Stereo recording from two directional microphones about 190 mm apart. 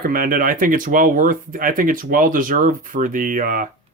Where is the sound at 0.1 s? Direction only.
50° right (ahead or behind).